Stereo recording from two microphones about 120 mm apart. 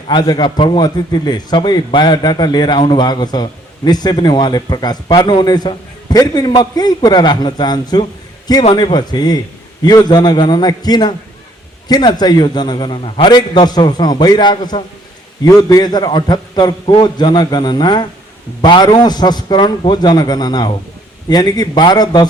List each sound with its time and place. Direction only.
0.1 s a man's voice: 40° left (ahead or behind)